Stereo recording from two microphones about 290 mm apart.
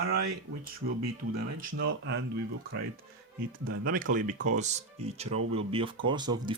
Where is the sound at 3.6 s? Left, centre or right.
Right.